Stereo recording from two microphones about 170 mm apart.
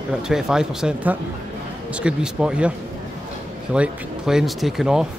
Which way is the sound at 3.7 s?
5° right (ahead or behind).